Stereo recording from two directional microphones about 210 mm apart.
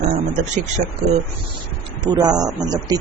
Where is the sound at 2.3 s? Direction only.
20° right (ahead or behind).